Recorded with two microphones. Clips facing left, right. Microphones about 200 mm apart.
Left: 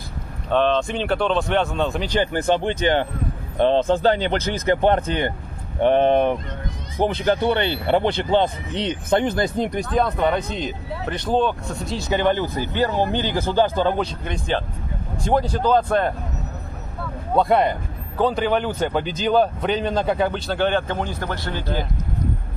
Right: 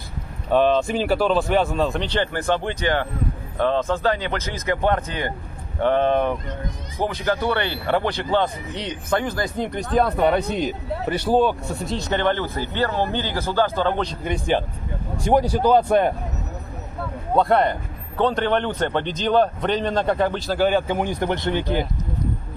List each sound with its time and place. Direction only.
0.5 s a man's voice: 10° right (ahead or behind)
2.0 s speech: 15° left (ahead or behind)
9.9 s speech: 5° right (ahead or behind)
11.9 s speech: 10° left (ahead or behind)
14.2 s speech: 10° right (ahead or behind)
17.4 s a man's voice: 10° left (ahead or behind); by 21.8 s 15° right (ahead or behind)